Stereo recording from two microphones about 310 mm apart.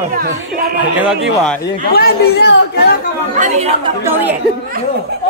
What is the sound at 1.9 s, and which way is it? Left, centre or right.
Speech, left.